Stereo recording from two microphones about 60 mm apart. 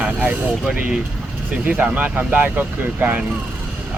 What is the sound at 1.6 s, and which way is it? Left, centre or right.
Speech, right.